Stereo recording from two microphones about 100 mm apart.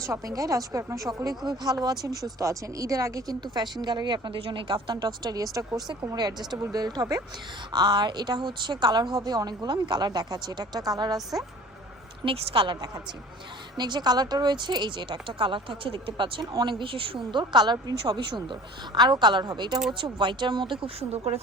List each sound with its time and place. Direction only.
0.0 s speech: 35° right (ahead or behind)
1.5 s speech: 45° right (ahead or behind)
3.4 s speech: 45° right (ahead or behind)
12.2 s speech: 65° right (ahead or behind)
13.7 s speech: 45° right (ahead or behind); by 21.3 s 75° right (ahead or behind)